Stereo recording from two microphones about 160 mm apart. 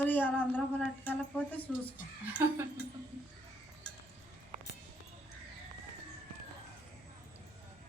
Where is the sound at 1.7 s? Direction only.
5° left (ahead or behind).